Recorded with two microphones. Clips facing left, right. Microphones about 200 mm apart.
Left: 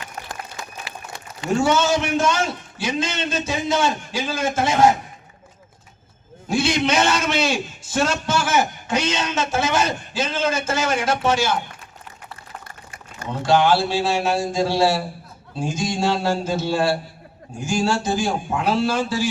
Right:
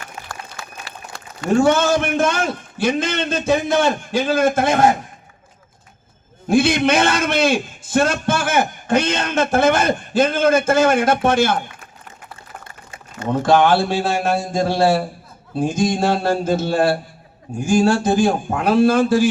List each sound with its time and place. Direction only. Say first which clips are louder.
0.0 s a sound: even; 20° left (ahead or behind)
1.5 s a man's voice: right 4 dB; 55° right (ahead or behind)
6.5 s a man's voice: right 5 dB; 55° right (ahead or behind)
13.2 s a man's voice: right 3 dB; 50° right (ahead or behind)